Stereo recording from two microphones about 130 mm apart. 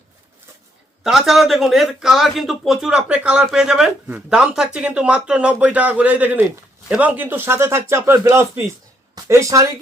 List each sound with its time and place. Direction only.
1.0 s a man's voice: 5° right (ahead or behind); by 9.6 s 25° right (ahead or behind)